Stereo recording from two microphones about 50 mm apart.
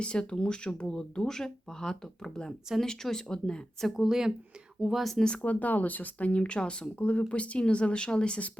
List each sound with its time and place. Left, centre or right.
0.0 s speech: centre
3.8 s speech: centre
5.4 s speech: left